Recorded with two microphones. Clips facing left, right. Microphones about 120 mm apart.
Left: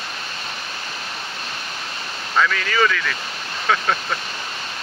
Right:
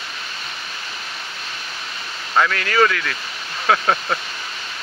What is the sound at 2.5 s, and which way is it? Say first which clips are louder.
Speech: right 3 dB; 5° right (ahead or behind).